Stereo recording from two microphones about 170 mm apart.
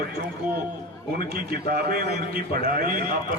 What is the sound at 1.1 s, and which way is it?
A man's voice, 60° right (ahead or behind).